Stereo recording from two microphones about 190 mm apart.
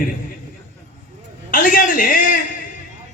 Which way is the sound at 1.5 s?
45° left (ahead or behind).